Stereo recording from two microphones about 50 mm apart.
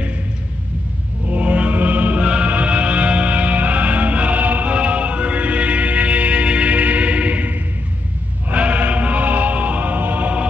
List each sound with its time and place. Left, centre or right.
1.2 s music: right
2.2 s music: centre